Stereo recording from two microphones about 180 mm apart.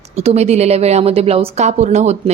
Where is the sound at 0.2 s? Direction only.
35° right (ahead or behind).